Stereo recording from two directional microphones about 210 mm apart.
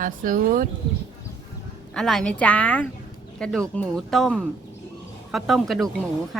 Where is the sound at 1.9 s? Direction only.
Centre (ahead or behind).